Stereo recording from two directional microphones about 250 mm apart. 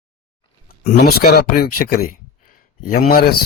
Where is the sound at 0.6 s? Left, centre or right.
Left.